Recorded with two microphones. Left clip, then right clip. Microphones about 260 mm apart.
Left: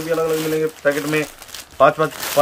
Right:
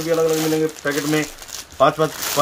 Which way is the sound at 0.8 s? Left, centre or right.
Centre.